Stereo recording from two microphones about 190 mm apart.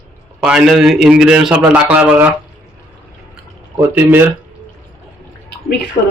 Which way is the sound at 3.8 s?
10° right (ahead or behind).